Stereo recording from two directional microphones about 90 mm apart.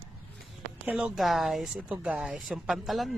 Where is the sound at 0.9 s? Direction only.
15° right (ahead or behind).